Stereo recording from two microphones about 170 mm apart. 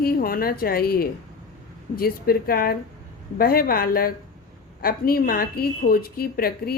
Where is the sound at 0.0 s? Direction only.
60° left (ahead or behind).